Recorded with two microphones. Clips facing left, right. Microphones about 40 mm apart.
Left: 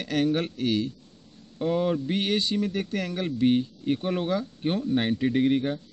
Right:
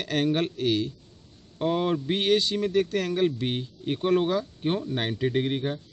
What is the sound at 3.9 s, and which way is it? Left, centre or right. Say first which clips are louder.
Speech: right 3 dB; right.